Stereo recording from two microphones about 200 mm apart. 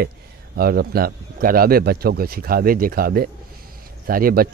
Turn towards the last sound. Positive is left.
turn(degrees=-45)  # may be behind; listen again after turning